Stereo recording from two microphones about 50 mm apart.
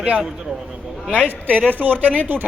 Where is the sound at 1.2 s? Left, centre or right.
Left.